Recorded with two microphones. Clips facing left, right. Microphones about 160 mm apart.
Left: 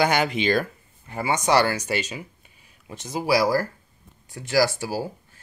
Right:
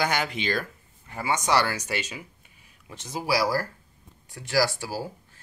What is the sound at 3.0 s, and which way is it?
Speech, 5° left (ahead or behind).